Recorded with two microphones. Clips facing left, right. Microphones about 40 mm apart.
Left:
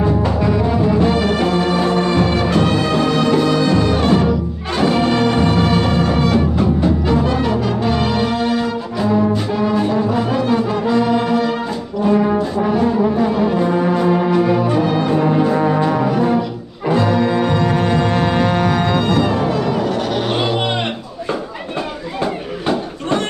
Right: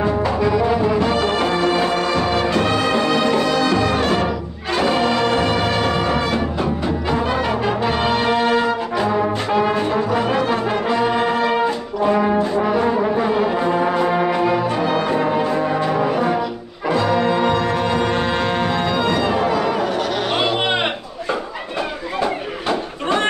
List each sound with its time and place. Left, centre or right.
0.8 s music: right
3.6 s music: right
5.1 s music: right
5.9 s music: right
7.1 s music: right
9.3 s brass instrument: right
10.1 s brass instrument: right
18.1 s music: right
19.0 s music: right